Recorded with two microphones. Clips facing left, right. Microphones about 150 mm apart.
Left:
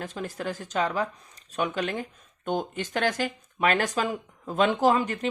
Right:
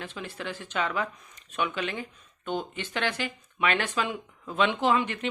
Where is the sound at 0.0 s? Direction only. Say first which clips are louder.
Left 4 dB; 40° left (ahead or behind).